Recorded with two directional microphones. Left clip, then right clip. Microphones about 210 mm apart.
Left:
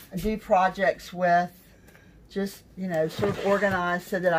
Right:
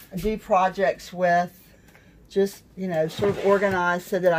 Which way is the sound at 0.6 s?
20° right (ahead or behind).